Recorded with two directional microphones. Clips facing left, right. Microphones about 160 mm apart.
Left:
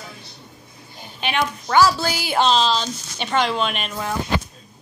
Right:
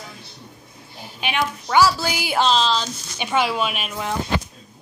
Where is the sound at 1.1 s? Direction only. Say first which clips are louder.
Left 1 dB; 10° right (ahead or behind).